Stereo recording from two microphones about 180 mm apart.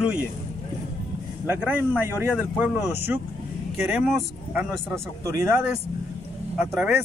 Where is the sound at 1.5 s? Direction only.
10° right (ahead or behind).